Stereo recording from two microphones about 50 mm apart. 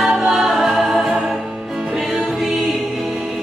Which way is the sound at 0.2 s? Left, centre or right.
Centre.